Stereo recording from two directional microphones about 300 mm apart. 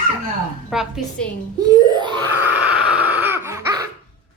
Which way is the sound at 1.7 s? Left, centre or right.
Centre.